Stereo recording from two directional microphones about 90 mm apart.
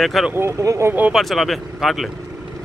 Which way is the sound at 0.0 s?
Centre (ahead or behind).